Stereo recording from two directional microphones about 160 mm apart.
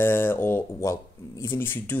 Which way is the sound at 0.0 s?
15° left (ahead or behind).